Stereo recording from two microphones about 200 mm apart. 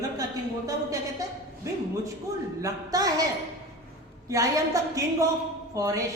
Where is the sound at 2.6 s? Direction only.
15° right (ahead or behind).